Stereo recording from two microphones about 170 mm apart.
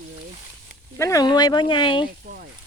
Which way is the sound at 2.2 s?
55° right (ahead or behind).